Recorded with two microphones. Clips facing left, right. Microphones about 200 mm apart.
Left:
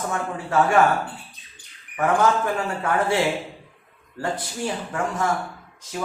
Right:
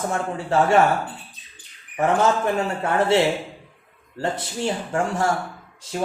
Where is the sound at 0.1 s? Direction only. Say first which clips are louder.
Even; 25° right (ahead or behind).